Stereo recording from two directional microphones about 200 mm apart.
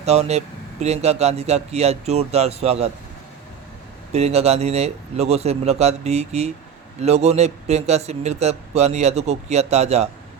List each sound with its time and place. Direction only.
0.0 s a man's voice: 30° right (ahead or behind)
4.1 s a man's voice: 30° right (ahead or behind)